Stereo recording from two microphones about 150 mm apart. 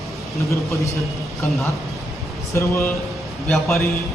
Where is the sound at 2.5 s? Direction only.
20° left (ahead or behind).